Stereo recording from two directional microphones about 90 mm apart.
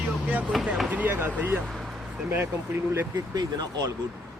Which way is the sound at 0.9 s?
20° right (ahead or behind).